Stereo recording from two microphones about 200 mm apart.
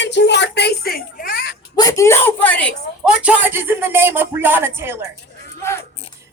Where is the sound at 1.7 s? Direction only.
20° left (ahead or behind).